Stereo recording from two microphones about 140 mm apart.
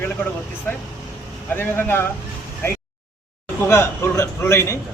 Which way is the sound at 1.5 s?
15° left (ahead or behind).